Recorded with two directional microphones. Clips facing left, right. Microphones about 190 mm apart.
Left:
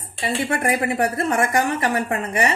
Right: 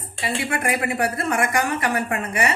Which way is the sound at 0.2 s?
40° left (ahead or behind).